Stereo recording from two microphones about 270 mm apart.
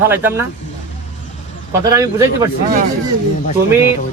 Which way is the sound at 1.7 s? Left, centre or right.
Centre.